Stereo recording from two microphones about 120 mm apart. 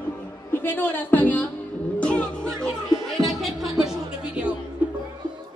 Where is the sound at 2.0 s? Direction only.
10° left (ahead or behind).